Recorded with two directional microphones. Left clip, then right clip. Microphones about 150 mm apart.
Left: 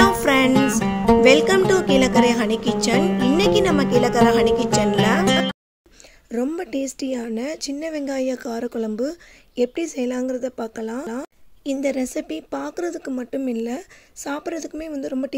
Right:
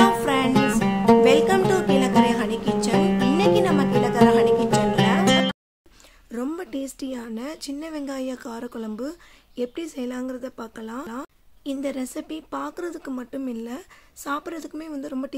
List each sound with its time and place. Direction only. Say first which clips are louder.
0.2 s music: left 5 dB; 35° left (ahead or behind)
0.5 s music: left 2 dB; centre (ahead or behind)
1.2 s music: left 3 dB; 30° left (ahead or behind)
3.0 s music: left 2 dB; centre (ahead or behind)
3.3 s music: left 2 dB; 30° left (ahead or behind)
5.2 s music: left 1 dB; centre (ahead or behind)
6.3 s speech: left 5 dB; 25° left (ahead or behind)